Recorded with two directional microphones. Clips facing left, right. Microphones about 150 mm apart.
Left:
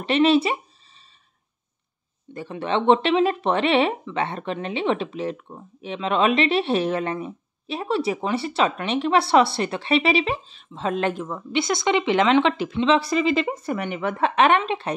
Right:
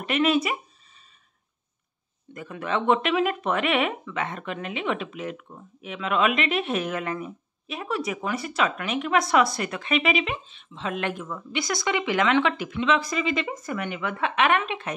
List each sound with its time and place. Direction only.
0.0 s speech: 30° left (ahead or behind)
2.3 s speech: 30° left (ahead or behind)